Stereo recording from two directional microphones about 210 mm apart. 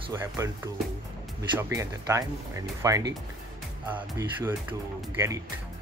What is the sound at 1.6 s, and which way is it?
Speech, 15° right (ahead or behind).